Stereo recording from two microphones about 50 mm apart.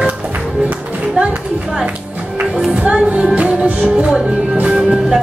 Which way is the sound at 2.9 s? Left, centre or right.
Right.